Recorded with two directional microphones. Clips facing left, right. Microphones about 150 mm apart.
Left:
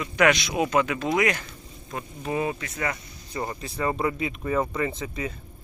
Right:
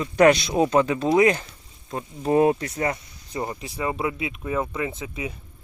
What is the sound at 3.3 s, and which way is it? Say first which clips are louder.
Speech: right 2 dB; 15° right (ahead or behind).